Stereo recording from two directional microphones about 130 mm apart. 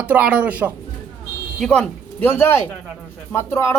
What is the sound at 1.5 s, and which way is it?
Speech, 5° left (ahead or behind).